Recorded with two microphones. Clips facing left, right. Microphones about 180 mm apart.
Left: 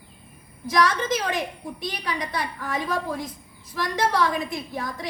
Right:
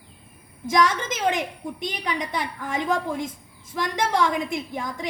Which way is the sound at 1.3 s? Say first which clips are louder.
Right 1 dB; 20° right (ahead or behind).